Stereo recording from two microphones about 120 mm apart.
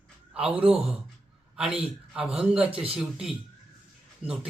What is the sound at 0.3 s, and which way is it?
A man's voice, 10° right (ahead or behind).